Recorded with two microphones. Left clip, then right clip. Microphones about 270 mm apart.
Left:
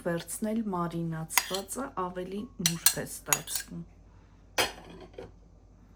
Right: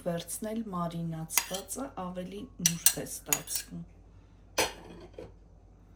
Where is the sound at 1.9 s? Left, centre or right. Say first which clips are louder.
Left 5 dB; left.